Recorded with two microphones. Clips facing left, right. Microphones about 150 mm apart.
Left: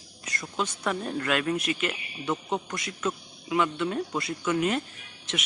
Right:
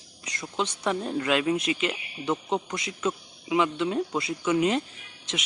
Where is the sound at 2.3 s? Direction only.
Centre (ahead or behind).